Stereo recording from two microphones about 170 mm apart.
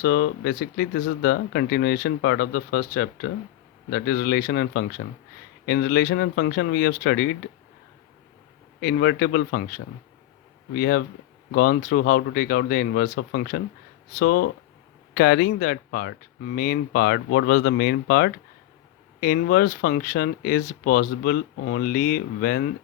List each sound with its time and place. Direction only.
0.0 s speech: 70° left (ahead or behind)
8.8 s speech: 70° left (ahead or behind)